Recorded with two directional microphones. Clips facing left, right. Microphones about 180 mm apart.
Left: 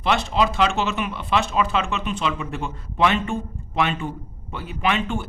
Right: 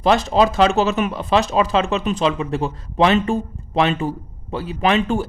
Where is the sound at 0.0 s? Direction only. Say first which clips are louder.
Right 6 dB; 40° right (ahead or behind).